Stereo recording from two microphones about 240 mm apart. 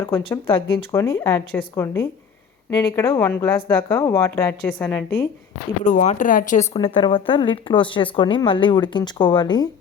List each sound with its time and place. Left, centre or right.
0.0 s a woman's voice: left
5.8 s speech: left
6.7 s speech: centre